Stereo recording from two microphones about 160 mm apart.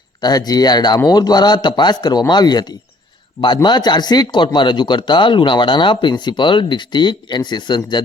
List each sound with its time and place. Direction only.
0.2 s speech: 25° left (ahead or behind)